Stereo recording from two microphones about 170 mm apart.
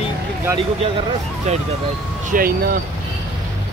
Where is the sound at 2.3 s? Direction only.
60° right (ahead or behind).